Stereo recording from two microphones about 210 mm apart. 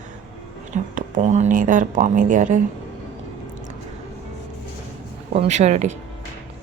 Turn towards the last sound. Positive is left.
turn(degrees=-35)  # may be behind; listen again after turning